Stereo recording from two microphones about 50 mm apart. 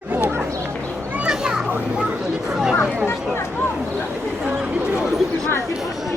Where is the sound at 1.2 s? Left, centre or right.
Centre.